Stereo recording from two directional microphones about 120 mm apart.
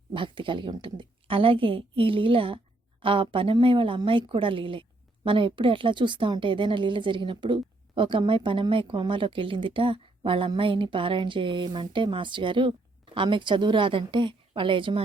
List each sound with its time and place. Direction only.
0.1 s a woman's voice: 45° right (ahead or behind)